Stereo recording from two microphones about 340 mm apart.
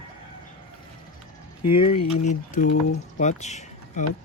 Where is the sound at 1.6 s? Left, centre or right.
Left.